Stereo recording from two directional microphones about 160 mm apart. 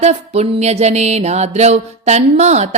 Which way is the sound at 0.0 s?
45° right (ahead or behind).